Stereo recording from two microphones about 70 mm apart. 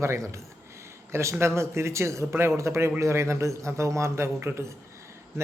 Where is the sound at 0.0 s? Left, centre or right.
Right.